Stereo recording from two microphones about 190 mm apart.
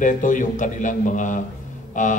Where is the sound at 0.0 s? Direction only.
40° left (ahead or behind).